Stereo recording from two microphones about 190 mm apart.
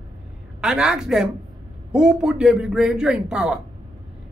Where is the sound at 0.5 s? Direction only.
5° right (ahead or behind).